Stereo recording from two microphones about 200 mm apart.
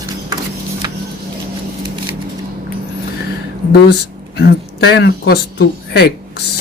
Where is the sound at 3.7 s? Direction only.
55° left (ahead or behind).